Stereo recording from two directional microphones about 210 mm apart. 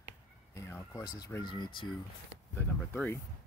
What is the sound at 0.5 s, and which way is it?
Speech, 15° left (ahead or behind).